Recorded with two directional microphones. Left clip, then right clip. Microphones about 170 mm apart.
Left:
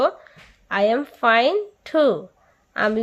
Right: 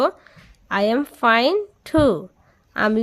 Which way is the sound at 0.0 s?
35° right (ahead or behind).